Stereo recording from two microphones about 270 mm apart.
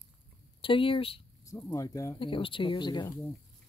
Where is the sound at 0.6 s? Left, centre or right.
Centre.